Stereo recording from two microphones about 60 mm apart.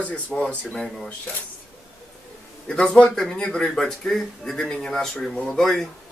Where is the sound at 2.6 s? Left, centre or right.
Centre.